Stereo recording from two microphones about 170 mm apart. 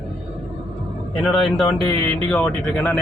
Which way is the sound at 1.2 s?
Centre (ahead or behind).